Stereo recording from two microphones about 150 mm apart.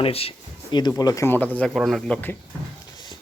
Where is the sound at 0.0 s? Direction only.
40° left (ahead or behind); by 2.3 s 5° left (ahead or behind).